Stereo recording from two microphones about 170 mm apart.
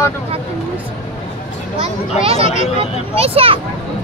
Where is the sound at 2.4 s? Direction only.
45° left (ahead or behind).